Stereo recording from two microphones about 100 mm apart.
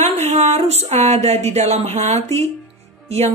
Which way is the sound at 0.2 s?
90° right.